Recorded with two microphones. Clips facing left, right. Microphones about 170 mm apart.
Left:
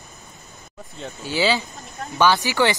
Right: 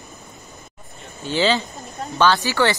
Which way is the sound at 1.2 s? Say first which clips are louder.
Right 2 dB; 10° left (ahead or behind).